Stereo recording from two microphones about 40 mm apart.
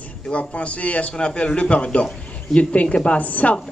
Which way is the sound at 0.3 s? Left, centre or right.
Left.